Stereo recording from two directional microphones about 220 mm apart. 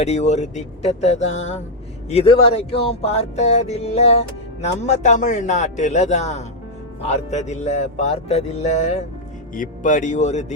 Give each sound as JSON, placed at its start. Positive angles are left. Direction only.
{"t": 0.0, "sound": "speech", "side_deg": 30}